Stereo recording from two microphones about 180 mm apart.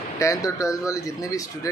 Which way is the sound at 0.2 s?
20° left (ahead or behind).